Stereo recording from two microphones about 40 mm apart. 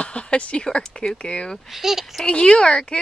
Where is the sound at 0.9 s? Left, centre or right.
Left.